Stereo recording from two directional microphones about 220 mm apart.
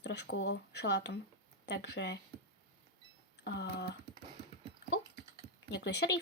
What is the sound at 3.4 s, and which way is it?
Speech, 50° left (ahead or behind).